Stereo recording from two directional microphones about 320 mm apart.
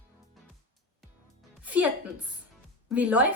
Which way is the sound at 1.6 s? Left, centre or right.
Centre.